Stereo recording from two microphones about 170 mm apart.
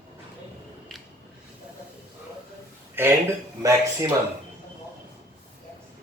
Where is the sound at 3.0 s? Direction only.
15° right (ahead or behind).